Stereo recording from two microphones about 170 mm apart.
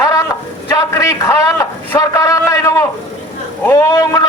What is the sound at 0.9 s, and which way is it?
A man's voice, 20° left (ahead or behind).